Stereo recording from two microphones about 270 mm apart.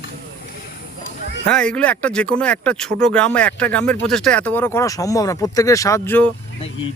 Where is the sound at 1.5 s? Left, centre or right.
Centre.